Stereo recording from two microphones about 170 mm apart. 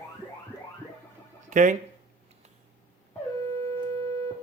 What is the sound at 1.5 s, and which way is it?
Speech, 45° right (ahead or behind).